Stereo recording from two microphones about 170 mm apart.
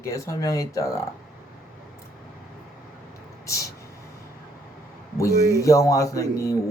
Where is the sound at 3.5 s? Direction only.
20° left (ahead or behind).